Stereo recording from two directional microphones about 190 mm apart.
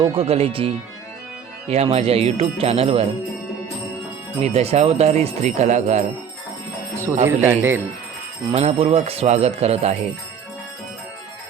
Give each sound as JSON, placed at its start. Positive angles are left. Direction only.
{"t": 0.2, "sound": "speech", "side_deg": -30}
{"t": 4.4, "sound": "speech", "side_deg": -35}
{"t": 7.3, "sound": "speech", "side_deg": -10}
{"t": 8.4, "sound": "speech", "side_deg": -35}